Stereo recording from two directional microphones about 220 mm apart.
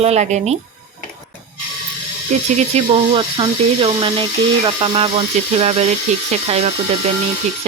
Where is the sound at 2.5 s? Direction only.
25° right (ahead or behind).